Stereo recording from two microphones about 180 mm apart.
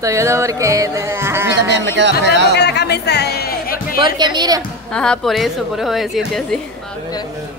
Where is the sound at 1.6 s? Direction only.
75° right (ahead or behind).